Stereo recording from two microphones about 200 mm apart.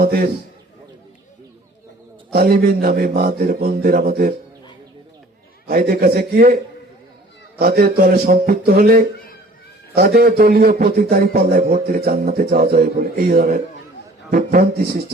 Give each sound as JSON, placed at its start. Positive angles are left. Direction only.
{"t": 2.3, "sound": "a man's voice", "side_deg": -50}
{"t": 5.6, "sound": "a man's voice", "side_deg": -50}
{"t": 7.6, "sound": "a man's voice", "side_deg": -50}